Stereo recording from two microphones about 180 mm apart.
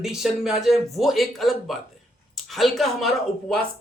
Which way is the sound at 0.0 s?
Centre (ahead or behind).